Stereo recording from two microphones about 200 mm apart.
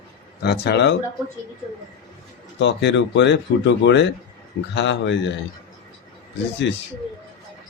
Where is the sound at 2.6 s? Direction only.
65° left (ahead or behind).